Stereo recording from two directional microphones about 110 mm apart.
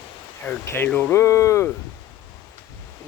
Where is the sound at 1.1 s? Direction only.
25° left (ahead or behind).